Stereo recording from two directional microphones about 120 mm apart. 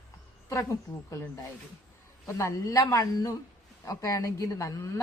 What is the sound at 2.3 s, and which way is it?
A man's voice, 25° left (ahead or behind).